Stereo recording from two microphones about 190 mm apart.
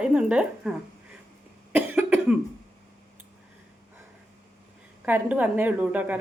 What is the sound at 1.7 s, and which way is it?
Cough, 10° right (ahead or behind).